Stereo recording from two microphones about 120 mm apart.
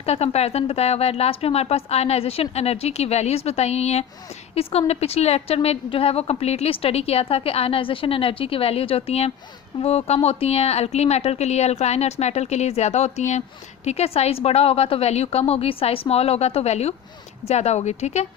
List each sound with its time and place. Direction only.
0.0 s a woman's voice: 60° left (ahead or behind)
13.8 s a woman's voice: 60° left (ahead or behind)